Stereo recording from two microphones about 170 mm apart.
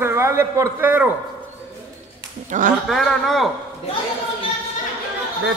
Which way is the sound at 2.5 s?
45° right (ahead or behind).